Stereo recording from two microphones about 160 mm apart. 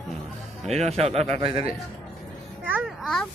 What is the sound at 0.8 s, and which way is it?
Speech, 40° right (ahead or behind).